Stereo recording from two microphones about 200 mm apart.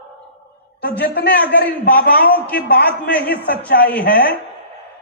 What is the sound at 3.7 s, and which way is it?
Speech, 50° left (ahead or behind).